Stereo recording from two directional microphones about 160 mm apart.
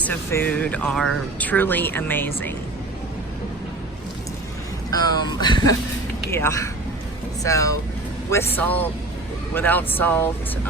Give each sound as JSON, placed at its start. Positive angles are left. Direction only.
{"t": 0.0, "sound": "speech", "side_deg": 15}
{"t": 4.9, "sound": "speech", "side_deg": 25}
{"t": 6.3, "sound": "speech", "side_deg": 15}